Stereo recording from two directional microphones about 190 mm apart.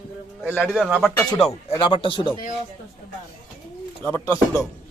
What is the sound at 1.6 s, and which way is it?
Speech, 25° left (ahead or behind).